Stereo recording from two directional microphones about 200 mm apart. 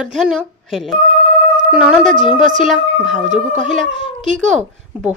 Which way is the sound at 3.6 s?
40° right (ahead or behind).